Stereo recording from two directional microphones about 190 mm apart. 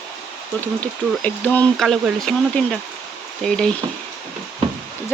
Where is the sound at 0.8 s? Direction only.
10° left (ahead or behind).